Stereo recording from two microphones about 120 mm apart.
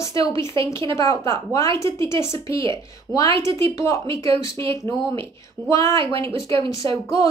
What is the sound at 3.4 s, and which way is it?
Speech, 25° left (ahead or behind).